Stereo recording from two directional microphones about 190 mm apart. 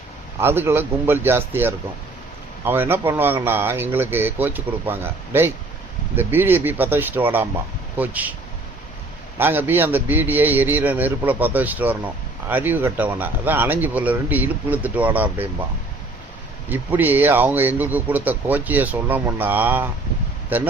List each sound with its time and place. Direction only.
0.3 s a man's voice: 10° right (ahead or behind)
9.4 s a man's voice: 10° right (ahead or behind)
16.6 s a man's voice: 10° right (ahead or behind)